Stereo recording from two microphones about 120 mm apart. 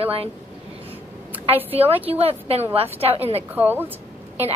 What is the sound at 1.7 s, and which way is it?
A woman's voice, 50° right (ahead or behind).